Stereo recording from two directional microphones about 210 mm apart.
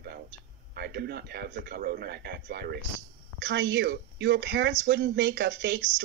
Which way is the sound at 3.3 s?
60° right (ahead or behind).